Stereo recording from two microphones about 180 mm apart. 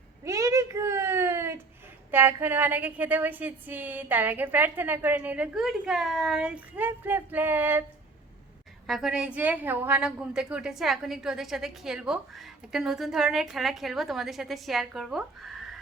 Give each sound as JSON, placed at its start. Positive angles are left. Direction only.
{"t": 0.3, "sound": "a sound", "side_deg": -20}
{"t": 2.0, "sound": "a woman's voice", "side_deg": -10}
{"t": 8.9, "sound": "a woman's voice", "side_deg": 0}